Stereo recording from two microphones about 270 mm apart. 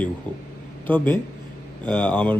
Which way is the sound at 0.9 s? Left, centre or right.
Centre.